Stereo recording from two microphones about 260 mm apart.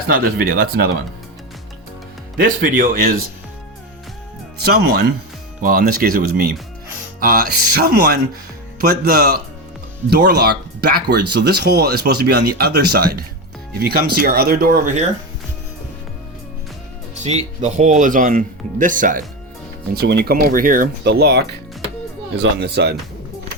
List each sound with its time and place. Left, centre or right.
0.1 s speech: right
2.4 s speech: right
4.6 s speech: right
17.2 s speech: right